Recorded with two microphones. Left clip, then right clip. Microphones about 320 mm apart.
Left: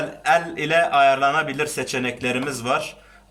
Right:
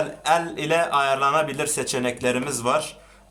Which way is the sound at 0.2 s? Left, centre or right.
Centre.